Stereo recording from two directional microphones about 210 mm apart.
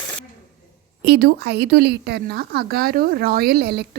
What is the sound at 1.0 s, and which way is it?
A woman's voice, 50° right (ahead or behind).